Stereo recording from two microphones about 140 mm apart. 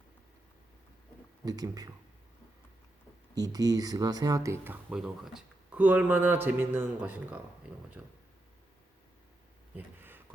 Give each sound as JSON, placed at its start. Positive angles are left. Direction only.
{"t": 1.5, "sound": "speech", "side_deg": -25}
{"t": 3.3, "sound": "speech", "side_deg": -25}
{"t": 9.7, "sound": "a sound", "side_deg": -15}